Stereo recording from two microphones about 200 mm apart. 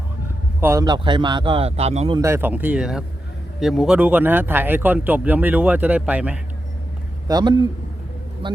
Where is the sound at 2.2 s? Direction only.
10° right (ahead or behind).